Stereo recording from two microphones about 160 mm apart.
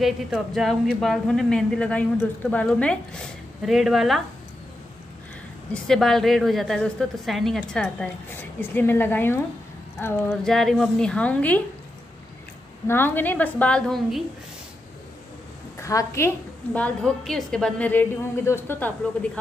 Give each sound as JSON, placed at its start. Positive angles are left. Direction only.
{"t": 0.0, "sound": "a woman's voice", "side_deg": 0}
{"t": 5.7, "sound": "a woman's voice", "side_deg": 5}
{"t": 10.4, "sound": "a woman's voice", "side_deg": 0}
{"t": 12.8, "sound": "a woman's voice", "side_deg": 15}
{"t": 15.8, "sound": "a woman's voice", "side_deg": 20}
{"t": 16.7, "sound": "a woman's voice", "side_deg": 5}